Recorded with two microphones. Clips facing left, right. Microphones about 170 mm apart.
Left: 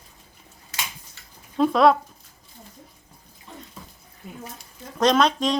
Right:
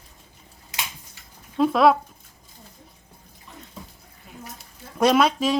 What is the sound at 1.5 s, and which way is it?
Speech, 5° right (ahead or behind).